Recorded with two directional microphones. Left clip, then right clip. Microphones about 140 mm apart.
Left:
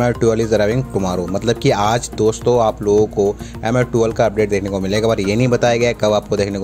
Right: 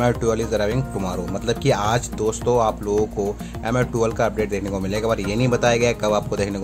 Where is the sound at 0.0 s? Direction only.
30° left (ahead or behind).